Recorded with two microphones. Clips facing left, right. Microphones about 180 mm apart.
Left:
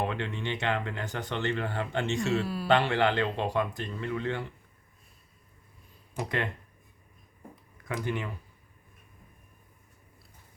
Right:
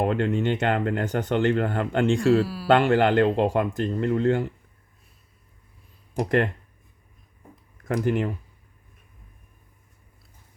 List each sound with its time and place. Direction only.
0.0 s speech: 45° right (ahead or behind)
6.1 s speech: 45° right (ahead or behind)
7.9 s speech: 45° right (ahead or behind)